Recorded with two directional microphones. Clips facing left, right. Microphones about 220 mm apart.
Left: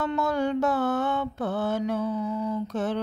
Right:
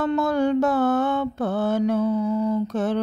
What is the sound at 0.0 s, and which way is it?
Mantra, 40° right (ahead or behind).